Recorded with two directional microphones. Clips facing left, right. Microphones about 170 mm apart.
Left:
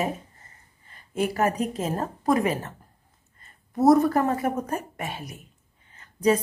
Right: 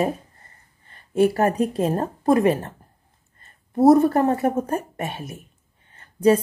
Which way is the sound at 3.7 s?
30° right (ahead or behind).